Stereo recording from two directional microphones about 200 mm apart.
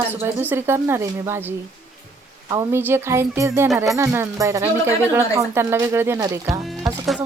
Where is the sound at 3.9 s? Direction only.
15° right (ahead or behind).